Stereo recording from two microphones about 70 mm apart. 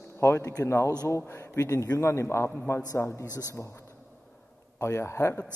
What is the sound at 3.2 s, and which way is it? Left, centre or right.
A man's voice, left.